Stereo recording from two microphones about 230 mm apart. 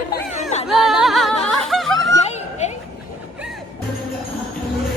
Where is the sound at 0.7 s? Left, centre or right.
Centre.